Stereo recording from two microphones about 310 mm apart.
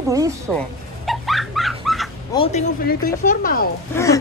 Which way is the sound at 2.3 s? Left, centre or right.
Centre.